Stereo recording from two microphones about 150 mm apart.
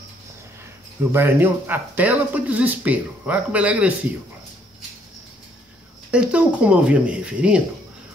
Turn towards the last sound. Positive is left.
turn(degrees=-5)  # may be behind; listen again after turning